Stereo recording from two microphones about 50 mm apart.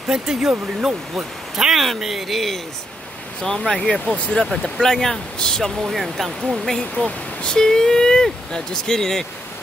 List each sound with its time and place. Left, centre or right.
0.1 s speech: centre